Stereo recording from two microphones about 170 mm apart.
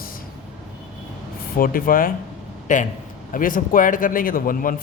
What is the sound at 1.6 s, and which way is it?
A man's voice, 55° left (ahead or behind).